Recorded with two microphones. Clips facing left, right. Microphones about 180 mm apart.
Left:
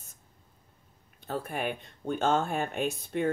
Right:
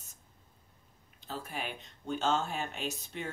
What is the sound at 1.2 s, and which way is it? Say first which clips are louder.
Speech: left 7 dB; 55° left (ahead or behind).